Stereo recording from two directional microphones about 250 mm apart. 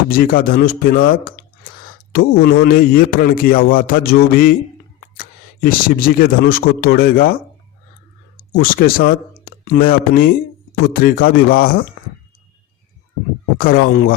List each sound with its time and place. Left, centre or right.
0.1 s a man's voice: left
8.5 s a man's voice: left
13.6 s a man's voice: left